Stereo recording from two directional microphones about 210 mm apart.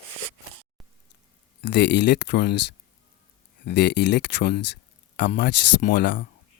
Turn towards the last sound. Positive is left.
turn(degrees=55)  # may be behind; listen again after turning